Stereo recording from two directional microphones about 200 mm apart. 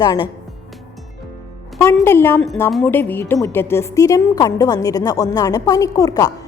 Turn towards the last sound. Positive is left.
turn(degrees=20)  # may be behind; listen again after turning